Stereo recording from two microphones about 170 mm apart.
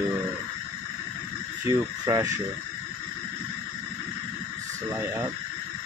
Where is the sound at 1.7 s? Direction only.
20° right (ahead or behind).